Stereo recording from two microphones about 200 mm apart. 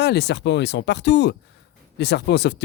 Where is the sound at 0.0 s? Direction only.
55° left (ahead or behind).